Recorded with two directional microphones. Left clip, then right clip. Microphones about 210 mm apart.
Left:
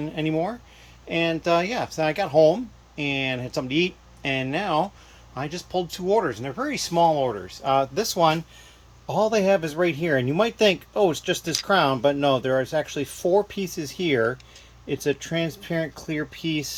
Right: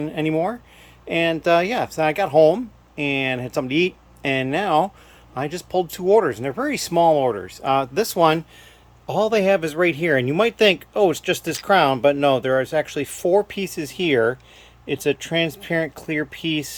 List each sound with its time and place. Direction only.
0.0 s speech: 20° right (ahead or behind)